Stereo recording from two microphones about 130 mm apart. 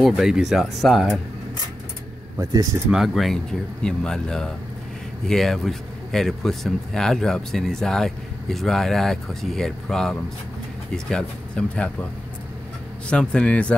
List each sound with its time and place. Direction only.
0.0 s speech: 5° right (ahead or behind)
2.5 s speech: 30° right (ahead or behind)
2.9 s speech: centre (ahead or behind)
13.1 s speech: 5° left (ahead or behind)